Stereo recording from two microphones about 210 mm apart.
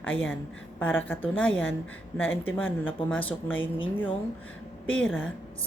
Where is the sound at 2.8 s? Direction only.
10° left (ahead or behind).